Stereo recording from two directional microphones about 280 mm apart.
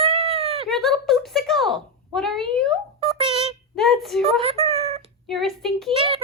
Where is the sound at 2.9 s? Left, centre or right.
Centre.